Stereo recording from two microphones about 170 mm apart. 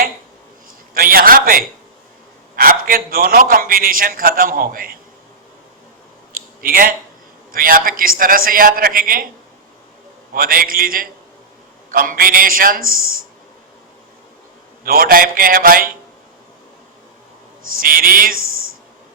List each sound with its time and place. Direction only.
0.9 s a man's voice: 60° right (ahead or behind)
6.3 s a sound: 55° right (ahead or behind)
7.5 s a man's voice: 55° right (ahead or behind)
10.3 s a man's voice: 60° right (ahead or behind)
14.8 s a man's voice: 60° right (ahead or behind)
17.7 s a man's voice: 55° right (ahead or behind)